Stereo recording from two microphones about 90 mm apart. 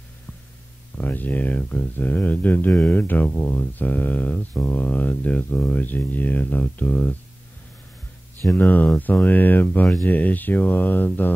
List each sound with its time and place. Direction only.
0.9 s speech: 20° left (ahead or behind)
2.7 s speech: 10° left (ahead or behind)
3.0 s speech: 20° left (ahead or behind)
8.5 s speech: 20° left (ahead or behind)